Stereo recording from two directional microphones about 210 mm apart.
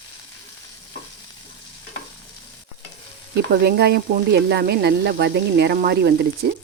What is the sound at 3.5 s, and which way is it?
Speech, 50° right (ahead or behind).